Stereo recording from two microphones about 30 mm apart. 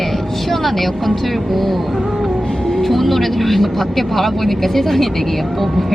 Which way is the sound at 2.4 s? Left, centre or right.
Centre.